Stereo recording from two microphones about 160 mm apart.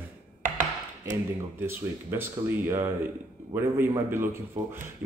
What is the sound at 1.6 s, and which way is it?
Speech, 15° right (ahead or behind).